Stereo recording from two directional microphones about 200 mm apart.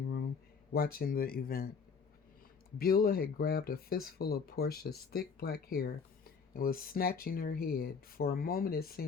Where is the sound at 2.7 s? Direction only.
50° left (ahead or behind).